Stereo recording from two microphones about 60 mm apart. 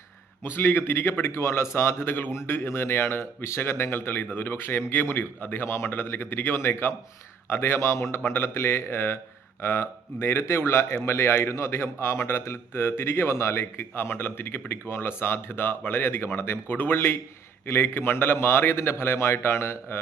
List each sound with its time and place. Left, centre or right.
0.4 s speech: left